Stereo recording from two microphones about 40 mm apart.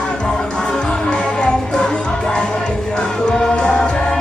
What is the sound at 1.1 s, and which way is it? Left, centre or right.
Music, left.